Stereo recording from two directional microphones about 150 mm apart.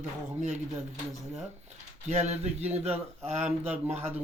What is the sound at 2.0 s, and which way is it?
Speech, 50° right (ahead or behind).